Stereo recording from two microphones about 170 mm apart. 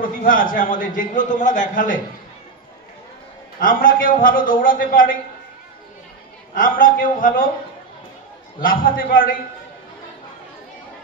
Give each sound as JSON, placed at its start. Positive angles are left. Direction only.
{"t": 0.0, "sound": "a man's voice", "side_deg": 55}
{"t": 3.5, "sound": "a man's voice", "side_deg": 55}
{"t": 6.5, "sound": "a man's voice", "side_deg": 55}
{"t": 8.5, "sound": "a man's voice", "side_deg": 55}